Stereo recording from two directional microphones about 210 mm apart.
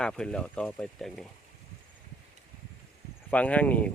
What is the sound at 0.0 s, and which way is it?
Speech, 5° left (ahead or behind).